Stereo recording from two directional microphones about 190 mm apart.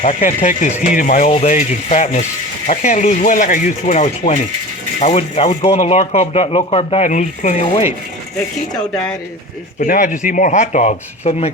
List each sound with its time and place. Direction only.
0.2 s speech: 40° left (ahead or behind)
9.8 s speech: 45° left (ahead or behind)